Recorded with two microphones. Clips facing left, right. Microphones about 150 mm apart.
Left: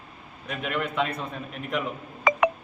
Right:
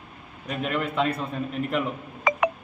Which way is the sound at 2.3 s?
90° left.